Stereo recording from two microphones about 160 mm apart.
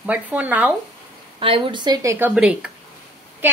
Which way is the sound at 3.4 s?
10° right (ahead or behind).